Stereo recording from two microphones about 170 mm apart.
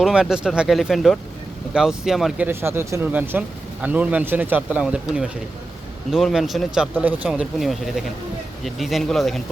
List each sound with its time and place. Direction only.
0.0 s speech: 5° right (ahead or behind)
2.5 s speech: 15° right (ahead or behind); by 9.4 s centre (ahead or behind)